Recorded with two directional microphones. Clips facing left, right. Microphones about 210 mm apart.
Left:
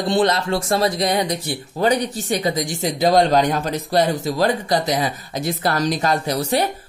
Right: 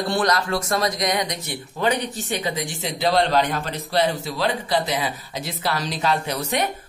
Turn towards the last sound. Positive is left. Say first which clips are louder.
# left 4 dB
turn(degrees=35)  # may be behind; listen again after turning